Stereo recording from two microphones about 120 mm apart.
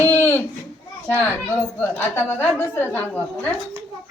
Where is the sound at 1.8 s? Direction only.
15° left (ahead or behind).